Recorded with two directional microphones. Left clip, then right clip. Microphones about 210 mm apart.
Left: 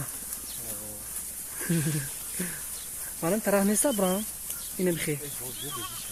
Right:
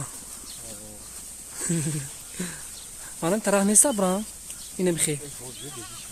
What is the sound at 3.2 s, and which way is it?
Speech, 25° right (ahead or behind).